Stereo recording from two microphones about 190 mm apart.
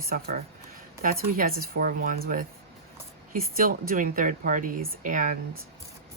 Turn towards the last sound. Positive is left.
turn(degrees=-45)  # may be behind; listen again after turning